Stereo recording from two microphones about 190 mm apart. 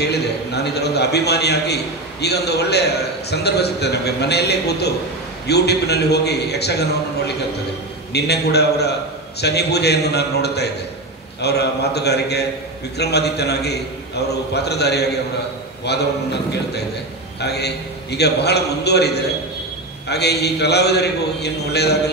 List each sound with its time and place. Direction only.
0.0 s a man's voice: 60° left (ahead or behind)
17.4 s a man's voice: 60° left (ahead or behind)